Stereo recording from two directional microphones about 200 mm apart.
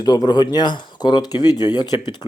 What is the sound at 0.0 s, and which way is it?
Speech, 20° left (ahead or behind).